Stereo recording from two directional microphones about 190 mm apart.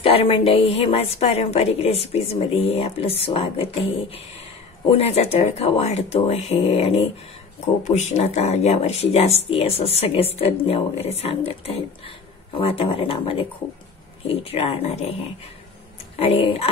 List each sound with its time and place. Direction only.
0.0 s a woman's voice: 30° left (ahead or behind)
16.2 s a woman's voice: 30° left (ahead or behind)